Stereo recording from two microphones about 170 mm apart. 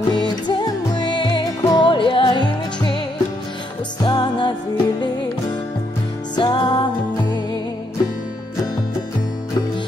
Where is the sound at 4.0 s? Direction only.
25° left (ahead or behind).